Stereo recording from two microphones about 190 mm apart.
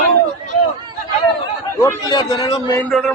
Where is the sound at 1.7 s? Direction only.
20° left (ahead or behind).